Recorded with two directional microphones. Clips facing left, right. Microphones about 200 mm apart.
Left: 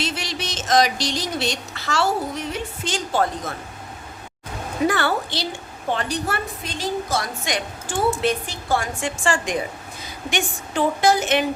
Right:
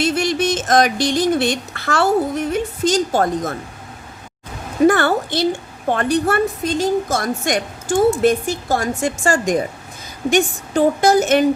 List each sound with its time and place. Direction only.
0.0 s a woman's voice: 50° right (ahead or behind)
4.9 s a woman's voice: 50° right (ahead or behind)